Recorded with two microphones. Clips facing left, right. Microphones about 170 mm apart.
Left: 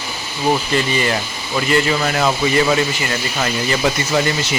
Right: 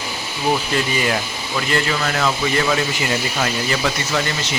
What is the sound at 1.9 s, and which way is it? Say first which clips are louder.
Speech: left 3 dB; 15° left (ahead or behind).